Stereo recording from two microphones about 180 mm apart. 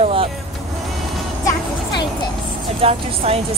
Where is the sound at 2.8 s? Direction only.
35° right (ahead or behind).